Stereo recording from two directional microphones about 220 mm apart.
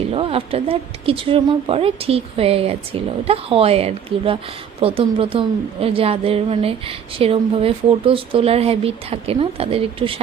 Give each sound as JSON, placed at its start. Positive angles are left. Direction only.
{"t": 0.1, "sound": "a woman's voice", "side_deg": -25}